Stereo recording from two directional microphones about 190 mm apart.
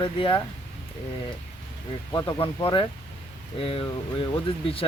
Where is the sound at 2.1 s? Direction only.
20° left (ahead or behind).